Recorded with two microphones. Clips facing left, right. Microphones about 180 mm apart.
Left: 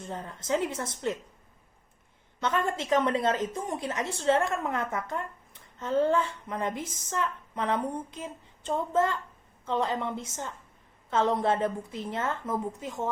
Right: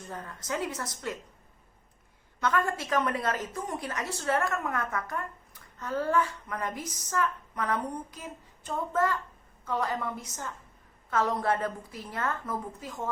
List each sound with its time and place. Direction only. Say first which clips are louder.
0.0 s a woman's voice: left 3 dB; 25° left (ahead or behind)
2.4 s a woman's voice: even; 25° left (ahead or behind)